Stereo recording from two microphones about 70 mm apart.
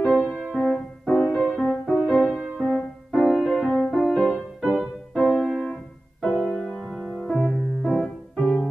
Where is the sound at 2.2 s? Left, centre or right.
Centre.